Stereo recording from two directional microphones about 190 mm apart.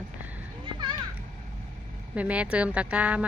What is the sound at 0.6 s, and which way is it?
Children playing, 25° right (ahead or behind).